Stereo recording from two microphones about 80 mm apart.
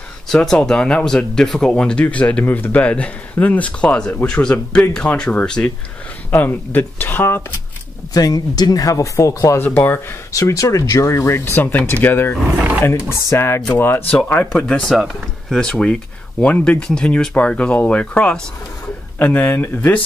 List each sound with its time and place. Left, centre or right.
0.4 s speech: centre
6.3 s speech: left
8.1 s speech: left
9.7 s speech: left
10.5 s speech: left
12.4 s speech: centre
12.8 s speech: left
14.0 s speech: centre
19.5 s speech: left